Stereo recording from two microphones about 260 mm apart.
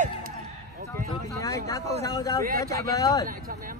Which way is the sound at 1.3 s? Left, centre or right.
Centre.